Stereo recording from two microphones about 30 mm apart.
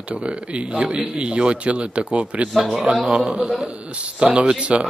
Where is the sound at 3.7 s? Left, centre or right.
Right.